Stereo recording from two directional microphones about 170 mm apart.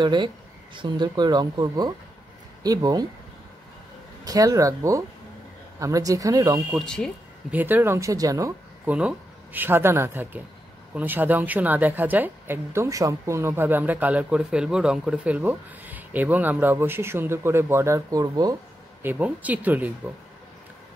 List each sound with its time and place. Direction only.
0.0 s speech: 25° right (ahead or behind)
4.2 s speech: 20° right (ahead or behind)
7.5 s a woman's voice: 10° right (ahead or behind)
19.0 s a woman's voice: 10° right (ahead or behind)